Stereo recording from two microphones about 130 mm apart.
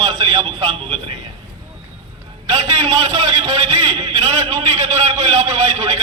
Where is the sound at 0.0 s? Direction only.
50° right (ahead or behind).